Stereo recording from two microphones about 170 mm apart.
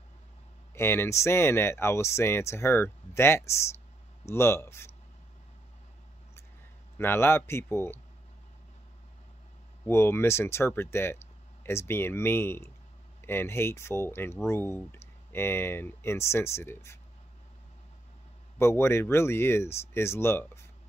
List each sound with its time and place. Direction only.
0.7 s speech: 15° left (ahead or behind)
7.0 s speech: 15° left (ahead or behind)
9.8 s speech: 15° left (ahead or behind)
18.6 s speech: 15° left (ahead or behind)